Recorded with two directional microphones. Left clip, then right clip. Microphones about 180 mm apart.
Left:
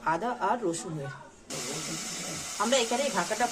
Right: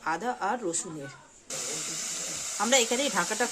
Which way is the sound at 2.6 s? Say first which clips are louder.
Right 1 dB; 35° right (ahead or behind).